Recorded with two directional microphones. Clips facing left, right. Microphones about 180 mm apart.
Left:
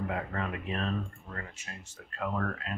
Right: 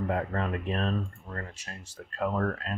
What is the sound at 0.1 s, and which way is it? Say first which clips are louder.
Speech: right 5 dB; 40° right (ahead or behind).